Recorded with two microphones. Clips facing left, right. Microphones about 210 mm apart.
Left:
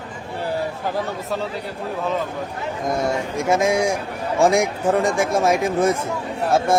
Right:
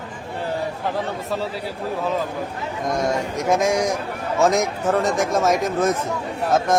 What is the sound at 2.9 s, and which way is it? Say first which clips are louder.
A man's voice: even; 10° left (ahead or behind).